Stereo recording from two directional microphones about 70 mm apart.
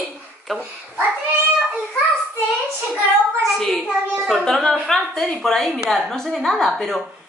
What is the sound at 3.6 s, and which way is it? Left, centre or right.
A woman's voice, centre.